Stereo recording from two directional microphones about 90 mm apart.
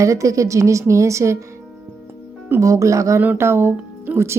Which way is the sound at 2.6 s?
35° right (ahead or behind).